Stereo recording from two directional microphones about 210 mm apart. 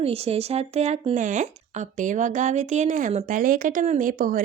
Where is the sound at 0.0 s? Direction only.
30° right (ahead or behind).